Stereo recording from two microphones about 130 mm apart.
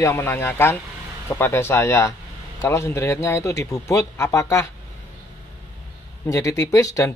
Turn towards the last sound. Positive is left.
turn(degrees=25)  # may be behind; listen again after turning